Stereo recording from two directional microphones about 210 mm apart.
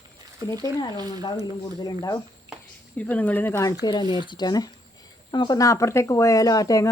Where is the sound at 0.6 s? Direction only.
20° left (ahead or behind).